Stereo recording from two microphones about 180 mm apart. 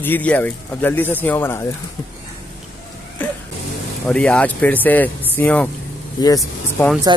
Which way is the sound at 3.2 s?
10° left (ahead or behind).